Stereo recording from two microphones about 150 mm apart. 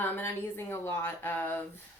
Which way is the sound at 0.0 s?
15° left (ahead or behind).